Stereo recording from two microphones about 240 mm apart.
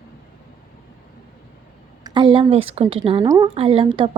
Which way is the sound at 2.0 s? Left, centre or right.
Centre.